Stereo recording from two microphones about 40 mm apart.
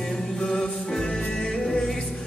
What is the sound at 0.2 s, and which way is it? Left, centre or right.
Music, centre.